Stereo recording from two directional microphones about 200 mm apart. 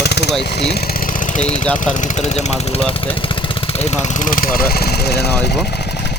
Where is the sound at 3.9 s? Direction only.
35° left (ahead or behind); by 6.2 s 55° left (ahead or behind).